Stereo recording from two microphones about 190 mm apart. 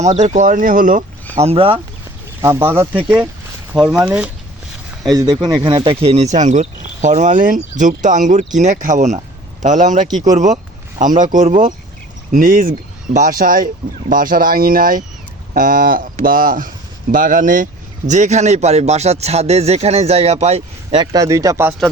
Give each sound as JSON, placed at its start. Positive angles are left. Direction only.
{"t": 0.0, "sound": "speech", "side_deg": -40}
{"t": 1.4, "sound": "speech", "side_deg": -30}
{"t": 2.4, "sound": "speech", "side_deg": -15}
{"t": 5.0, "sound": "speech", "side_deg": -20}
{"t": 10.3, "sound": "a sound", "side_deg": -40}
{"t": 11.2, "sound": "speech", "side_deg": -40}
{"t": 21.0, "sound": "speech", "side_deg": -20}